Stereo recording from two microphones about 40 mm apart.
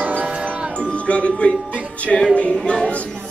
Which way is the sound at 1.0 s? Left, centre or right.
Left.